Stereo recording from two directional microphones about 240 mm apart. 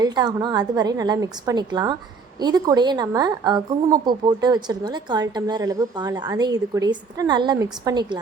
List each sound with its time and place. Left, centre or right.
0.0 s a woman's voice: centre